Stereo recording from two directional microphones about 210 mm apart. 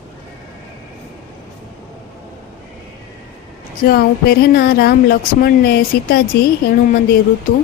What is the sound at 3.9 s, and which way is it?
Speech, 50° left (ahead or behind).